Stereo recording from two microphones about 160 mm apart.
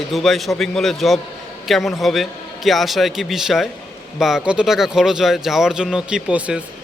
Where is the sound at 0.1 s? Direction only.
Centre (ahead or behind).